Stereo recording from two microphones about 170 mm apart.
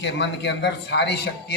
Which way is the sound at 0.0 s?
90° left.